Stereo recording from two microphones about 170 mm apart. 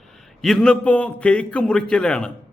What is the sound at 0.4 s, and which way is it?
A man's voice, 5° left (ahead or behind).